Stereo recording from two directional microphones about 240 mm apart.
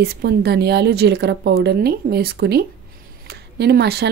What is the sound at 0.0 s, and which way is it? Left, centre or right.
Speech, right.